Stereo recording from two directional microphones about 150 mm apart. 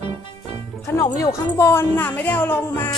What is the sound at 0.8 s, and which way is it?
Speech, 25° left (ahead or behind).